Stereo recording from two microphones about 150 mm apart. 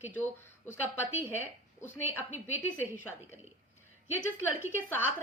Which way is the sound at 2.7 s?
10° left (ahead or behind).